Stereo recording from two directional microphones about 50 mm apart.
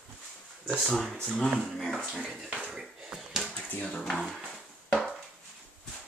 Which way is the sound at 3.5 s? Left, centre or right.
Left.